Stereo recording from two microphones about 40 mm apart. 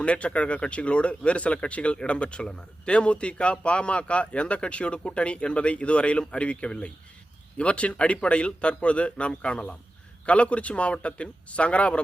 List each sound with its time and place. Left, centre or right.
0.0 s a man's voice: left